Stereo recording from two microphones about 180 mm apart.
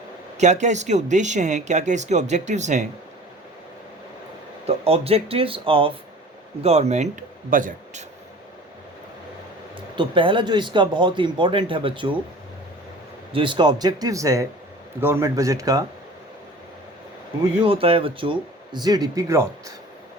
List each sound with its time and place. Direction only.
0.3 s speech: 40° right (ahead or behind)
4.6 s a man's voice: 35° right (ahead or behind)
9.9 s speech: 25° right (ahead or behind)
13.3 s speech: 25° right (ahead or behind)
17.7 s speech: 30° right (ahead or behind)